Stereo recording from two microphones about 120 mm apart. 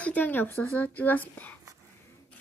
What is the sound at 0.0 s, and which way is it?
A child's voice, 10° left (ahead or behind).